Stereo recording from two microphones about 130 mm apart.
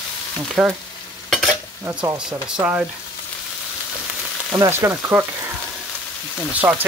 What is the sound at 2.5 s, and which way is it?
Frying, 10° right (ahead or behind).